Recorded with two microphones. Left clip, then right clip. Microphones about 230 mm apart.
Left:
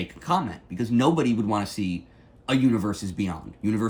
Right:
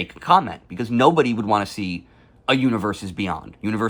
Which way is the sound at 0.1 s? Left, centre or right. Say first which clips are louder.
Right 10 dB; centre.